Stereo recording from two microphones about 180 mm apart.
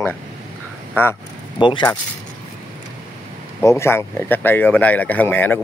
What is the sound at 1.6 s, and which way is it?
Speech, 25° left (ahead or behind).